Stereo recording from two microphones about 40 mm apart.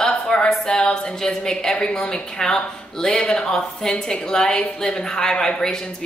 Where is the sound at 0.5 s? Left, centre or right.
Centre.